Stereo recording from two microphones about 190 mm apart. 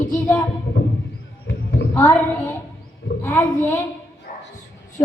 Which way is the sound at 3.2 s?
10° left (ahead or behind).